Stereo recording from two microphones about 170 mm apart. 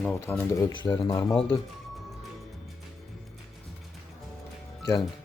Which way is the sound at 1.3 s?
5° left (ahead or behind).